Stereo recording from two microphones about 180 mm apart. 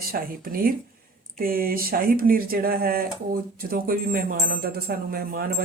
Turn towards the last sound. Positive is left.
turn(degrees=-55)  # may be behind; listen again after turning